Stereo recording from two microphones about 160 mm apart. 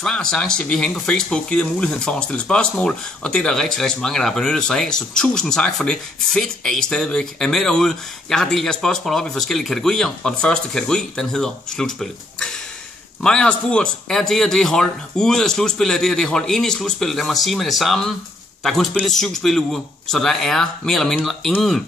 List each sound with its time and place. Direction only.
0.0 s speech: 5° left (ahead or behind)